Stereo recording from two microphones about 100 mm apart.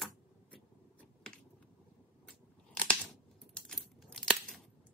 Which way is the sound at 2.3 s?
10° left (ahead or behind).